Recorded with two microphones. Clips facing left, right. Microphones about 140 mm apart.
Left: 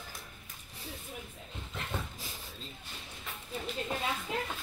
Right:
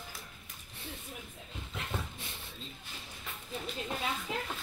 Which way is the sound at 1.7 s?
Centre (ahead or behind).